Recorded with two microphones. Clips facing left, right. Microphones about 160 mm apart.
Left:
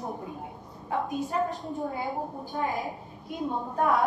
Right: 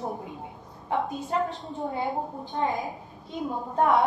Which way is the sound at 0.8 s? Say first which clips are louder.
Right 1 dB; 20° right (ahead or behind).